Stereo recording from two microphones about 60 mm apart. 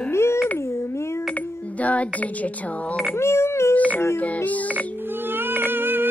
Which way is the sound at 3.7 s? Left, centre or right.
Left.